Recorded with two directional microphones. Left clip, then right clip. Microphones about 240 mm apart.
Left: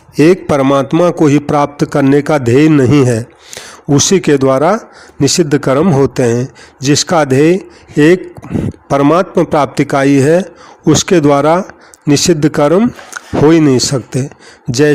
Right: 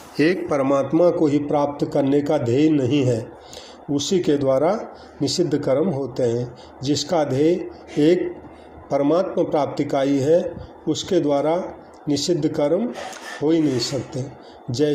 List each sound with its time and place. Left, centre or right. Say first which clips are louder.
0.2 s speech: left 10 dB; left